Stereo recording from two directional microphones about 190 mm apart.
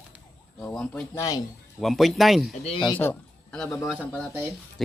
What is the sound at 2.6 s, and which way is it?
Speech, 30° left (ahead or behind).